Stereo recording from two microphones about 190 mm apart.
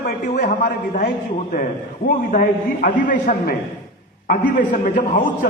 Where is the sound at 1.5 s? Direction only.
50° left (ahead or behind).